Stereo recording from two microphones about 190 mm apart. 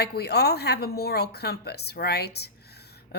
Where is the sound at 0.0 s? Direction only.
60° left (ahead or behind).